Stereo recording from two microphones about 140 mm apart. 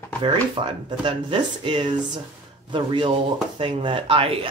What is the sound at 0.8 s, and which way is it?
Speech, 35° right (ahead or behind).